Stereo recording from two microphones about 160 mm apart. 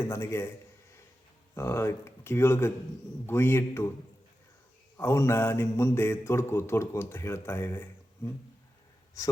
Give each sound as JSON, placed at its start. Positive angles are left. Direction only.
{"t": 0.0, "sound": "speech", "side_deg": 15}
{"t": 1.5, "sound": "speech", "side_deg": 15}
{"t": 4.9, "sound": "speech", "side_deg": 15}